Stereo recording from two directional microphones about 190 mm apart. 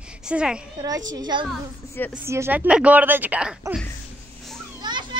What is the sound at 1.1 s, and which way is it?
A child's voice, 20° right (ahead or behind).